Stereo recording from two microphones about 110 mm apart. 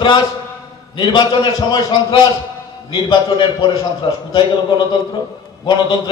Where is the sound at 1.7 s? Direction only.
35° left (ahead or behind).